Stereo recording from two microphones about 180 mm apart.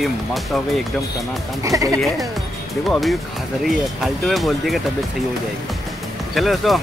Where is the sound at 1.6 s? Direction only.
20° right (ahead or behind).